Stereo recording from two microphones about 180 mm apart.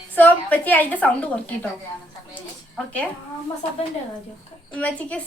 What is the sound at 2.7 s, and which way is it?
Speech, 5° left (ahead or behind).